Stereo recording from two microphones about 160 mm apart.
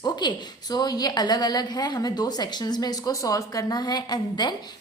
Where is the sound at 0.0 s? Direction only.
25° left (ahead or behind).